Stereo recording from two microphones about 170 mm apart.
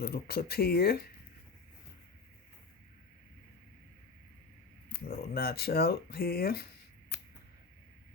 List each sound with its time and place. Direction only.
0.0 s speech: 65° left (ahead or behind)
5.0 s speech: 65° left (ahead or behind)